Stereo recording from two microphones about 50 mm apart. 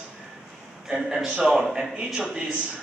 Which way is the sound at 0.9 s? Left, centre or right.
Centre.